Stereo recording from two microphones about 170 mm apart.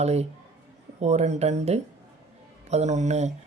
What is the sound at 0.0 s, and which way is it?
Speech, 40° right (ahead or behind).